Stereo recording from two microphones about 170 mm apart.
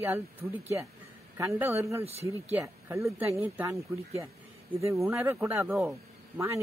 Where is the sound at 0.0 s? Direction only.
15° right (ahead or behind).